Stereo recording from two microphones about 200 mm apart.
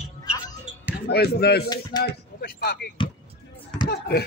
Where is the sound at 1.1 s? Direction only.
50° left (ahead or behind).